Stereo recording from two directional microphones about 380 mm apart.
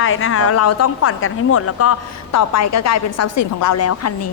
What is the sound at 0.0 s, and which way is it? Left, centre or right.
Speech, left.